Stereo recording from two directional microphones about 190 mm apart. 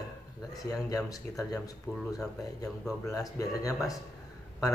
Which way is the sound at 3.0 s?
15° left (ahead or behind).